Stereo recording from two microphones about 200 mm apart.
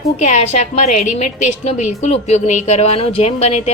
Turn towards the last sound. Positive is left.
turn(degrees=30)  # may be behind; listen again after turning